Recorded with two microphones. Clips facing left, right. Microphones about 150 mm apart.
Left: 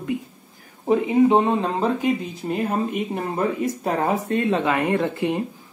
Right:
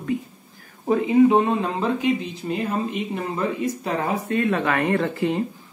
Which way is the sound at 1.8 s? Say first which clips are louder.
Left 1 dB; 45° left (ahead or behind).